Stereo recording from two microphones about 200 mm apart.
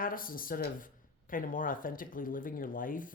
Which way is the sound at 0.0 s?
45° left (ahead or behind).